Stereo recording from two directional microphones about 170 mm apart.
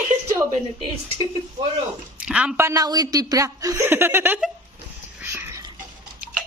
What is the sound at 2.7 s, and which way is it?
A woman's voice, 20° right (ahead or behind).